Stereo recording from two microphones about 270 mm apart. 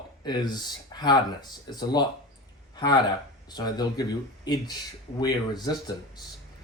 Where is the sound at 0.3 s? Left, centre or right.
Centre.